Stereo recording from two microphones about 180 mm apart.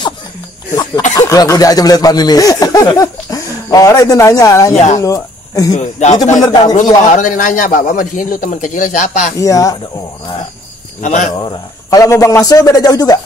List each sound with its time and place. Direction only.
1.1 s speech: 20° left (ahead or behind)
4.7 s speech: 40° left (ahead or behind)
5.0 s speech: 20° left (ahead or behind)
5.7 s speech: 40° left (ahead or behind)
6.3 s speech: 20° left (ahead or behind)
6.6 s a man's voice: 40° left (ahead or behind)
9.4 s speech: 20° left (ahead or behind)
11.0 s speech: 40° left (ahead or behind)
11.3 s speech: 20° left (ahead or behind)